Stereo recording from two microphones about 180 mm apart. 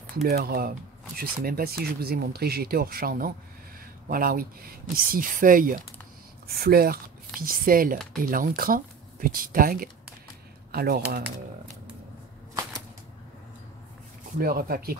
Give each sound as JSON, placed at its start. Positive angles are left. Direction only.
{"t": 0.1, "sound": "speech", "side_deg": -55}
{"t": 14.4, "sound": "speech", "side_deg": -55}